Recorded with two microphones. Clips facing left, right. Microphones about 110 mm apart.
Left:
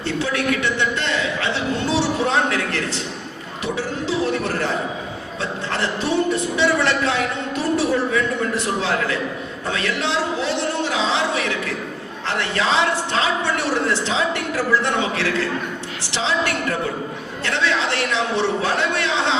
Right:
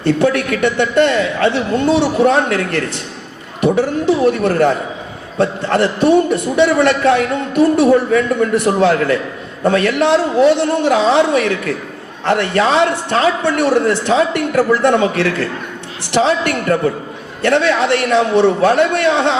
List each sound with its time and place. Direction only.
0.0 s a man's voice: 55° right (ahead or behind)